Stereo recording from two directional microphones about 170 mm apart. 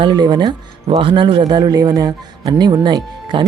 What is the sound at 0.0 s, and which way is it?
Speech, 25° right (ahead or behind).